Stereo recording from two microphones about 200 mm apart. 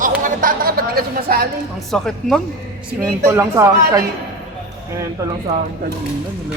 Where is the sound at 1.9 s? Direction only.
5° left (ahead or behind).